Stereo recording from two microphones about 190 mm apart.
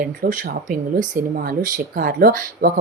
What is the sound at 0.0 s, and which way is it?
Speech, 50° right (ahead or behind).